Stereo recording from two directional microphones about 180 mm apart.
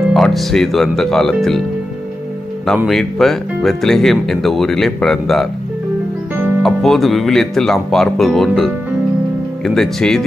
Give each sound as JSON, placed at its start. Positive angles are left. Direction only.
{"t": 0.1, "sound": "speech", "side_deg": 0}
{"t": 2.6, "sound": "speech", "side_deg": 0}
{"t": 6.6, "sound": "speech", "side_deg": 0}
{"t": 9.8, "sound": "speech", "side_deg": 0}